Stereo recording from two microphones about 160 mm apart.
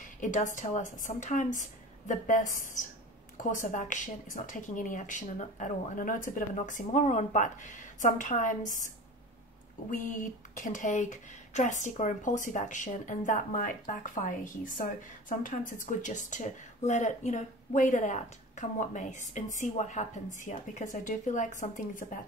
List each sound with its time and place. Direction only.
0.2 s a woman's voice: 55° left (ahead or behind)
9.8 s a woman's voice: 55° left (ahead or behind)